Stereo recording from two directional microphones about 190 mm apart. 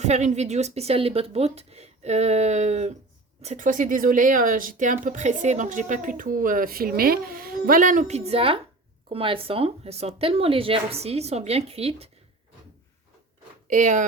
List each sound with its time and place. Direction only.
0.0 s speech: 40° right (ahead or behind)
13.7 s speech: 40° right (ahead or behind)